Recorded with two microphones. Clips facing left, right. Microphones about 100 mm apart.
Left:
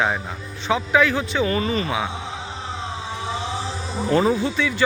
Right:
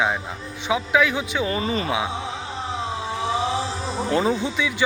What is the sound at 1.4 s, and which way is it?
Speech, 30° right (ahead or behind).